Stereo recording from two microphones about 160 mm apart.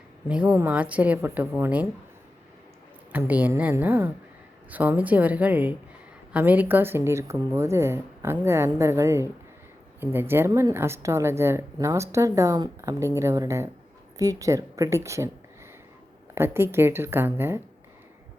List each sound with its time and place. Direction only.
0.3 s a woman's voice: 5° right (ahead or behind)
3.1 s a woman's voice: 10° right (ahead or behind)
16.3 s a woman's voice: 15° right (ahead or behind)